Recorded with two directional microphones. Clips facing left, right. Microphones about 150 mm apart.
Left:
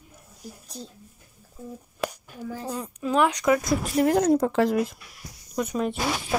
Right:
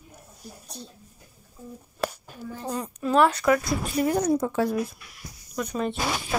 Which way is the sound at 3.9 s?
90° left.